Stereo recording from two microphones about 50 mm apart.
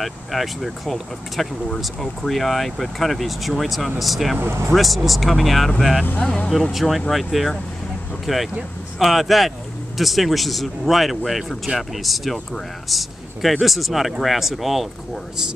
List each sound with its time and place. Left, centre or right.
0.0 s speech: centre
4.4 s speech: right
4.7 s speech: centre
6.0 s speech: left
6.7 s speech: centre